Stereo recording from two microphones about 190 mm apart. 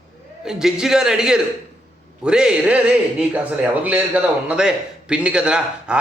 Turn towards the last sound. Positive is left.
turn(degrees=-5)  # may be behind; listen again after turning